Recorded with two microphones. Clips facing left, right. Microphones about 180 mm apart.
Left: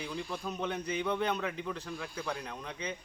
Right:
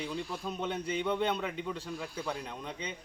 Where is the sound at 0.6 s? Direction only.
30° right (ahead or behind).